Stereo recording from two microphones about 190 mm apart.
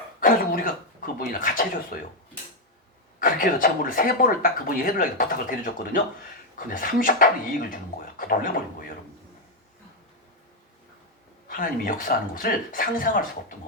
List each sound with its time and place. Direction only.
0.2 s speech: 45° left (ahead or behind)
3.2 s speech: 45° left (ahead or behind)
11.4 s speech: 45° left (ahead or behind)